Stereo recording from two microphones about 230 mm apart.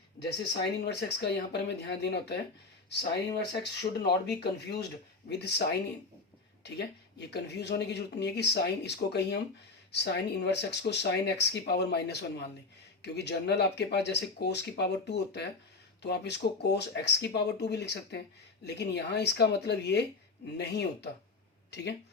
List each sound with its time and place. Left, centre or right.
0.2 s speech: left
6.6 s speech: left